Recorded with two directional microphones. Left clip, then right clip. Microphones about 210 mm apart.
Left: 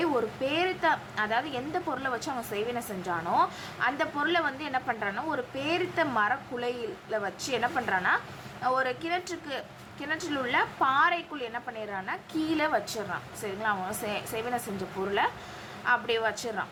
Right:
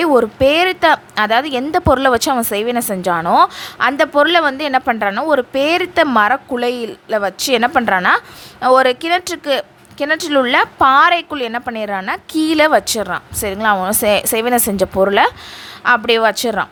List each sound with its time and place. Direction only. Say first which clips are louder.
0.0 s a woman's voice: right 17 dB; 50° right (ahead or behind)